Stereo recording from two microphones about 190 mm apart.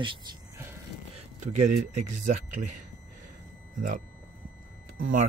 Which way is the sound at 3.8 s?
45° right (ahead or behind).